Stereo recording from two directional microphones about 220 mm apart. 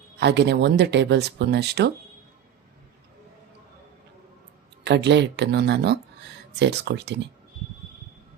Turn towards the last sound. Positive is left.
turn(degrees=-50)  # may be behind; listen again after turning